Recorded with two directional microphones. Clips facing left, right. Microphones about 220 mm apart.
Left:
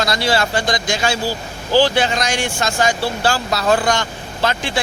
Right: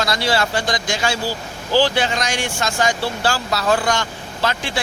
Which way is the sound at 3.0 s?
15° left (ahead or behind).